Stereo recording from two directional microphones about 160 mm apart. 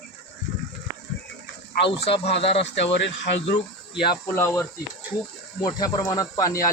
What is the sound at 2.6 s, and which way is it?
Speech, 90° left.